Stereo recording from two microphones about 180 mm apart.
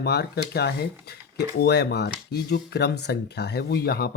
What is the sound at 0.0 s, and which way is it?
Speech, 65° left (ahead or behind).